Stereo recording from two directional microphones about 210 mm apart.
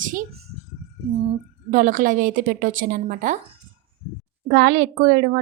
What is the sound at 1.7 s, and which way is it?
A woman's voice, 40° right (ahead or behind).